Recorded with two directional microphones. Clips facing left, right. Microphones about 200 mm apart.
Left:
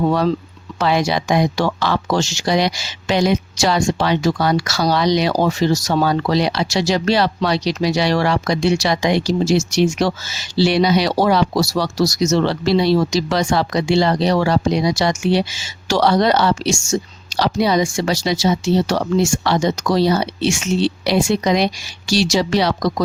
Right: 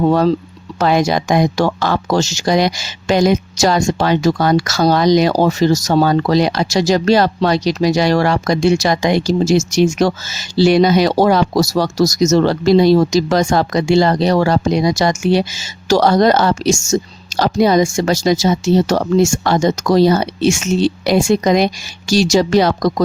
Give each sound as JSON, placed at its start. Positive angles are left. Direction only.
{"t": 0.1, "sound": "speech", "side_deg": -45}